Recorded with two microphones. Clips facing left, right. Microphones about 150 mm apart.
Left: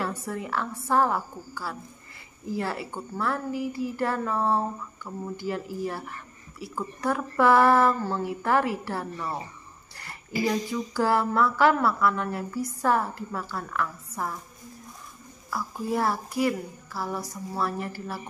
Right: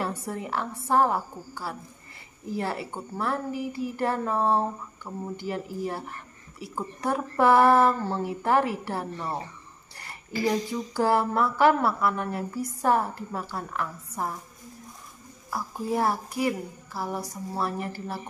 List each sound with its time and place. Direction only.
0.0 s speech: 20° right (ahead or behind)
10.4 s speech: 20° right (ahead or behind)
15.5 s speech: 20° right (ahead or behind)